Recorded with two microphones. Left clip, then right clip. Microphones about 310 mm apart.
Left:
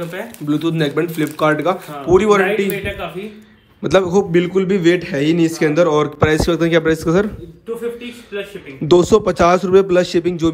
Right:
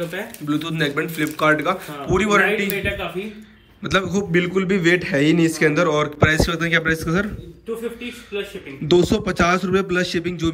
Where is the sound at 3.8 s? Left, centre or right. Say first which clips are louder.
Left 7 dB; centre.